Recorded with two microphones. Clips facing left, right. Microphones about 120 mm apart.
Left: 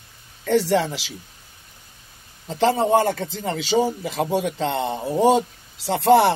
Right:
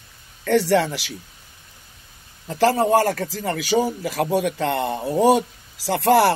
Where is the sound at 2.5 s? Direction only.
20° left (ahead or behind).